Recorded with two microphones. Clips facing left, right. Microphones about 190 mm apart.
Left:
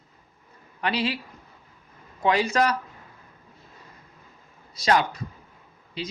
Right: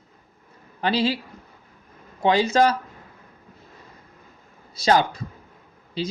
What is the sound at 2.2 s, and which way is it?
Speech, 25° right (ahead or behind).